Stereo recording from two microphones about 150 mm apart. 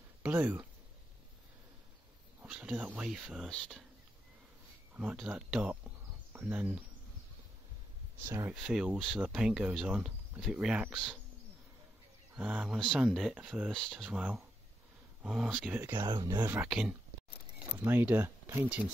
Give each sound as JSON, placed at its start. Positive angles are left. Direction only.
{"t": 0.2, "sound": "speech", "side_deg": -10}
{"t": 2.4, "sound": "speech", "side_deg": -10}
{"t": 4.9, "sound": "speech", "side_deg": -10}
{"t": 8.2, "sound": "speech", "side_deg": -15}
{"t": 8.5, "sound": "speech", "side_deg": -5}
{"t": 12.4, "sound": "speech", "side_deg": -5}
{"t": 13.7, "sound": "speech", "side_deg": 5}
{"t": 15.2, "sound": "speech", "side_deg": -5}
{"t": 15.9, "sound": "speech", "side_deg": -30}
{"t": 16.4, "sound": "speech", "side_deg": -10}